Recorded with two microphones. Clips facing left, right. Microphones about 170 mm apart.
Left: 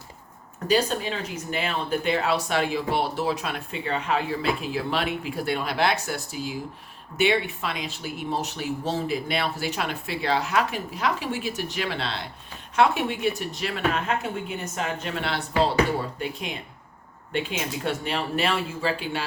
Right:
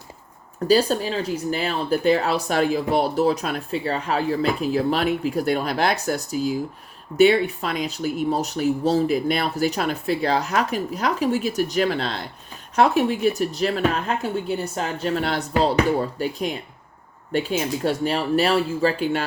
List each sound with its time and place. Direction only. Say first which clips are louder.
0.7 s speech: right 5 dB; 35° right (ahead or behind)